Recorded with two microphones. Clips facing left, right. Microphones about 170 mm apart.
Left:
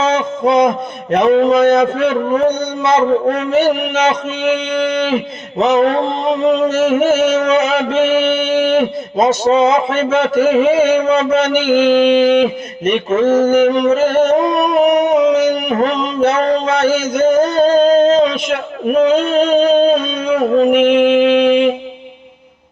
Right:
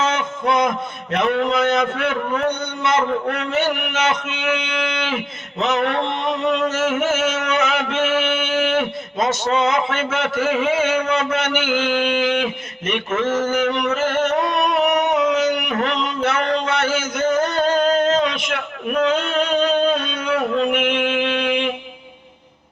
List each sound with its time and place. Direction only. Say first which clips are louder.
0.0 s a man's voice: left 7 dB; 30° left (ahead or behind)
14.4 s singing: left 6 dB; 50° left (ahead or behind)
15.3 s a sound: left 6 dB; 35° left (ahead or behind)